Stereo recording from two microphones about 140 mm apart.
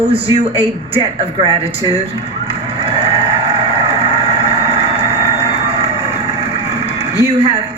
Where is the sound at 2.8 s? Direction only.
40° right (ahead or behind).